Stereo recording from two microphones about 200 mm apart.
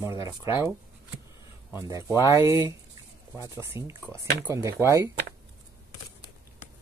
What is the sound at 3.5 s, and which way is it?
Speech, 15° right (ahead or behind).